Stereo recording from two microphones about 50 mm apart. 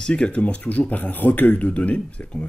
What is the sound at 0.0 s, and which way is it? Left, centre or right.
Speech, left.